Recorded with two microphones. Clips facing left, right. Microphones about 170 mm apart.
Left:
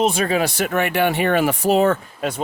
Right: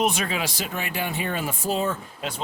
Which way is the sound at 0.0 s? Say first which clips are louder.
Left 5 dB; 30° left (ahead or behind).